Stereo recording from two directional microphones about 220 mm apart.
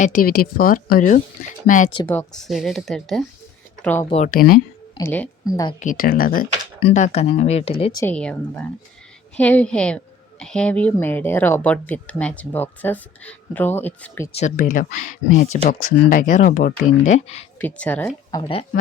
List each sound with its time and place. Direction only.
0.0 s speech: 40° left (ahead or behind)
2.0 s speech: 5° left (ahead or behind)
4.1 s speech: 35° left (ahead or behind)
4.9 s speech: 10° left (ahead or behind)
5.8 s speech: 40° left (ahead or behind)
8.0 s speech: 5° left (ahead or behind)
14.3 s speech: 35° left (ahead or behind)
17.6 s speech: 5° left (ahead or behind)